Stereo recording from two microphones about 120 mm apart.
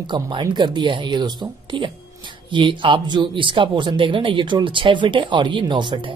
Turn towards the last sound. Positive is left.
turn(degrees=-45)  # may be behind; listen again after turning